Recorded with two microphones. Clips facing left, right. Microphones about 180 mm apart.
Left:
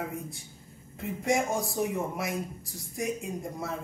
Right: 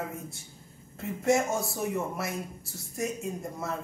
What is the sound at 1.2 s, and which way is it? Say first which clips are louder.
Speech: right 2 dB; 15° left (ahead or behind).